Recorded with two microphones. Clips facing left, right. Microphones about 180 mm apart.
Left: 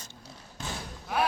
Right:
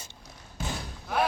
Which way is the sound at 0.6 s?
10° right (ahead or behind).